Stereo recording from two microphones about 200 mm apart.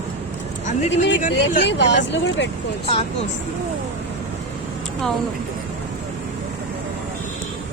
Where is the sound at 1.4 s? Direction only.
60° left (ahead or behind).